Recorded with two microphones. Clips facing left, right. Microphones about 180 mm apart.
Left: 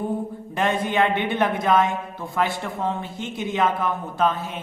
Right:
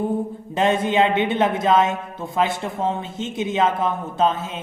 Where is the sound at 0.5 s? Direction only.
20° right (ahead or behind).